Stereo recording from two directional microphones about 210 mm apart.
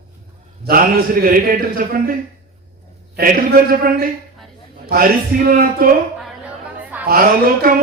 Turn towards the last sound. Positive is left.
turn(degrees=-45)  # may be behind; listen again after turning